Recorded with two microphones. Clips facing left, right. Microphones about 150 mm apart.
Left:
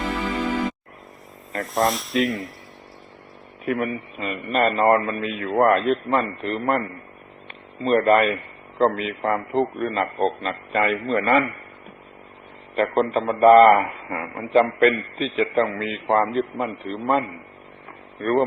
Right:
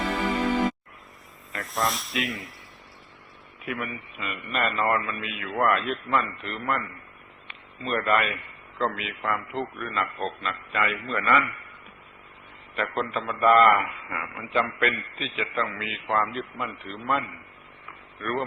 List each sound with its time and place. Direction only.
1.5 s speech: centre (ahead or behind)
3.7 s a man's voice: 40° left (ahead or behind)
12.7 s a man's voice: 40° left (ahead or behind)